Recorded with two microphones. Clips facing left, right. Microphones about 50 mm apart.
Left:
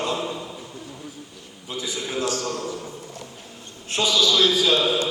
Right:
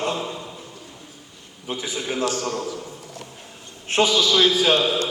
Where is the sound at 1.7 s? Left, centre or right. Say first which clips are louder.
Right 1 dB; right.